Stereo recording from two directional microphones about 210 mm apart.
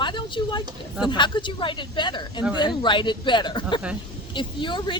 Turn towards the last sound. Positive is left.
turn(degrees=20)  # may be behind; listen again after turning